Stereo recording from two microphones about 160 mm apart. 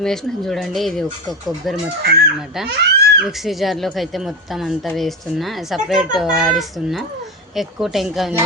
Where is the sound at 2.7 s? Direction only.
90° right.